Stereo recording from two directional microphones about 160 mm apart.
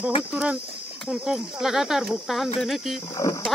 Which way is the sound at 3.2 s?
20° left (ahead or behind).